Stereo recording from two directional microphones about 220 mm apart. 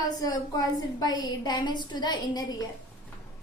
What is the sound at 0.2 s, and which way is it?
A woman's voice, 15° left (ahead or behind).